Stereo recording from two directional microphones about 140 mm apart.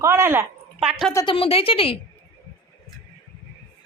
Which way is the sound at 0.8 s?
5° right (ahead or behind).